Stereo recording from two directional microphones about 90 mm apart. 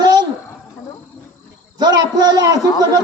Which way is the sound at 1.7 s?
50° right (ahead or behind).